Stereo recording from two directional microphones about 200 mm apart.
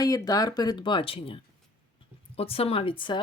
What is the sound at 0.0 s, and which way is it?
Speech, 20° left (ahead or behind).